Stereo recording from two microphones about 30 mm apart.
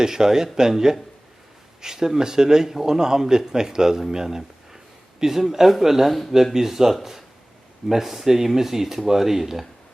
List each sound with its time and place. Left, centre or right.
0.0 s a man's voice: centre